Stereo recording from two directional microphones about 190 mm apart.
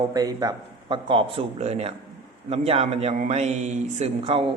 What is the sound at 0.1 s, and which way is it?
A man's voice, 20° right (ahead or behind).